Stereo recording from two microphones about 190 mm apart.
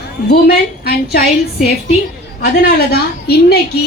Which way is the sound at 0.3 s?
55° left (ahead or behind).